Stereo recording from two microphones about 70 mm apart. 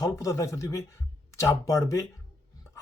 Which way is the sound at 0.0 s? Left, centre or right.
Left.